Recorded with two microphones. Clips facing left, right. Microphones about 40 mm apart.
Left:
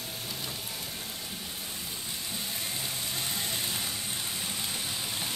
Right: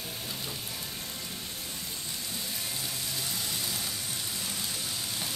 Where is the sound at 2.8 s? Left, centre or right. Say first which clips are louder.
Left 1 dB; left.